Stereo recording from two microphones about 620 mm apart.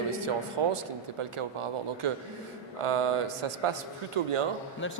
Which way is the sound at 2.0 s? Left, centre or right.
Right.